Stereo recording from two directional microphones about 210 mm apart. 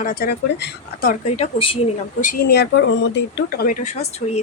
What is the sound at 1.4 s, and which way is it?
Speech, 25° left (ahead or behind).